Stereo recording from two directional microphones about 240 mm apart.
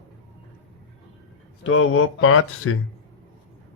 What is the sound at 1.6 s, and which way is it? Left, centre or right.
Speech, left.